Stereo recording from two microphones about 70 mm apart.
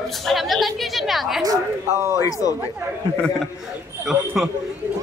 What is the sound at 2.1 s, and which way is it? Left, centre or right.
Speech, left.